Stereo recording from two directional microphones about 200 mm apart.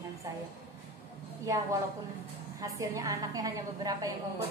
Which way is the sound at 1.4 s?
15° right (ahead or behind).